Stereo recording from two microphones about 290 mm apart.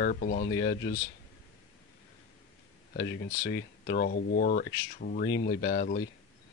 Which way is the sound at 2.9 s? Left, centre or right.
Left.